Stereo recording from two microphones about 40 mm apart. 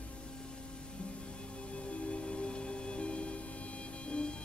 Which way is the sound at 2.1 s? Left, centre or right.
Left.